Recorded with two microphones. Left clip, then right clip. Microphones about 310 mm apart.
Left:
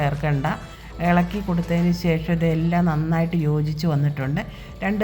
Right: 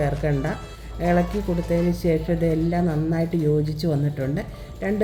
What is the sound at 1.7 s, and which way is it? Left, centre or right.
A woman's voice, centre.